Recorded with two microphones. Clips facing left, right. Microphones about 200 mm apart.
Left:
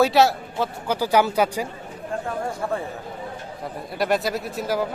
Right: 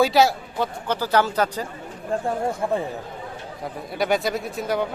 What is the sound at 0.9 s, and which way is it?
Speech, 15° left (ahead or behind).